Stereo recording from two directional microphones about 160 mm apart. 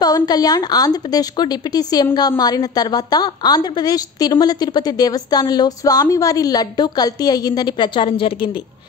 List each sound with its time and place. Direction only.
0.0 s a woman's voice: 25° left (ahead or behind)